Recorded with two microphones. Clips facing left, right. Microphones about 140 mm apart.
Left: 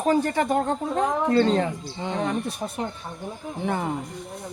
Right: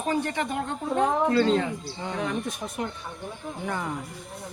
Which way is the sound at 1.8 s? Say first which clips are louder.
Left 3 dB; 20° left (ahead or behind).